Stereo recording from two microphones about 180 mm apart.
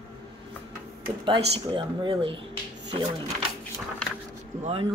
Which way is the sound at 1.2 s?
25° right (ahead or behind).